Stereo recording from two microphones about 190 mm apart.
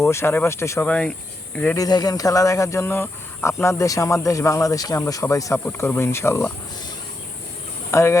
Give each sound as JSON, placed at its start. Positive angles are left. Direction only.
{"t": 0.0, "sound": "speech", "side_deg": 15}
{"t": 7.9, "sound": "speech", "side_deg": 15}